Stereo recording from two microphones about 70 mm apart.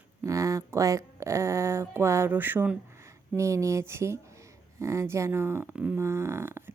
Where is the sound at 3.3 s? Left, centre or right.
Right.